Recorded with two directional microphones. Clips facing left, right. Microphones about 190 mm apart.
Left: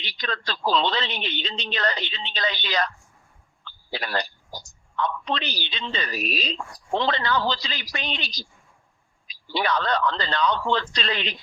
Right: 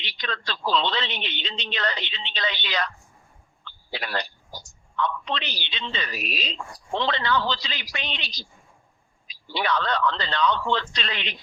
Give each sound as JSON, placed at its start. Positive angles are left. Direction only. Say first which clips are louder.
{"t": 0.0, "sound": "a man's voice", "louder": "left 2 dB", "side_deg": 40}